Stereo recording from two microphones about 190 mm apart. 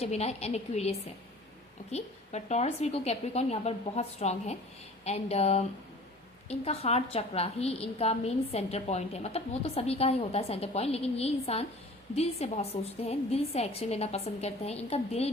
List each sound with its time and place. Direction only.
0.0 s a woman's voice: 35° left (ahead or behind)